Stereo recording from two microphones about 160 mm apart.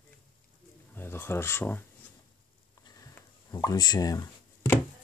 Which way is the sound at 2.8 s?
20° left (ahead or behind).